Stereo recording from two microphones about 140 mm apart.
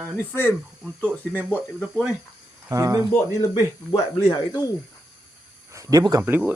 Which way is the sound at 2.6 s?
25° right (ahead or behind).